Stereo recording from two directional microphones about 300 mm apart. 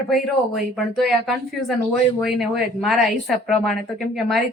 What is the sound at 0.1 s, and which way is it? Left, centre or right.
Speech, centre.